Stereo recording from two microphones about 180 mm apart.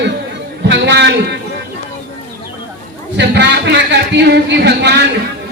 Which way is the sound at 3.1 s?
70° right (ahead or behind).